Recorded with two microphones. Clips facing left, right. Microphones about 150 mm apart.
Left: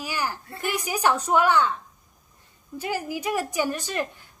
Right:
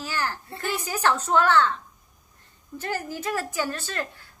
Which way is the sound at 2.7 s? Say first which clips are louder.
Left 2 dB; 10° left (ahead or behind).